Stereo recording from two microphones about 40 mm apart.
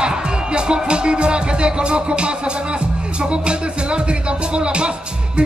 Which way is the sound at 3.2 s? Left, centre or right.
Right.